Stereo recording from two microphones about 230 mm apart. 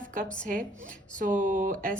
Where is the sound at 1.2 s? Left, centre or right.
Right.